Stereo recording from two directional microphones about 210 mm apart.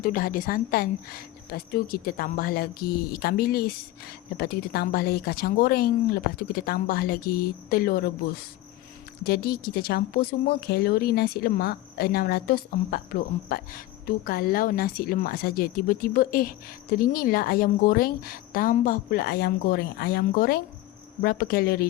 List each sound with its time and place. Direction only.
0.0 s speech: 40° left (ahead or behind)
9.2 s speech: 50° left (ahead or behind)